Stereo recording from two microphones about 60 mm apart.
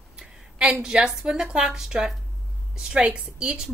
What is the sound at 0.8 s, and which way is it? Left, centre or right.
A woman's voice, centre.